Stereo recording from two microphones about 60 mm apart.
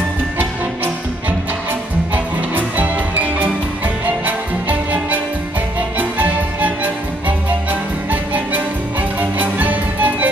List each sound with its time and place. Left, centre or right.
2.1 s music: right
9.2 s music: right